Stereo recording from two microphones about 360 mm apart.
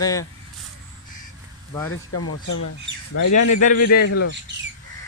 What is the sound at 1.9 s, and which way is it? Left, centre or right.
Speech, left.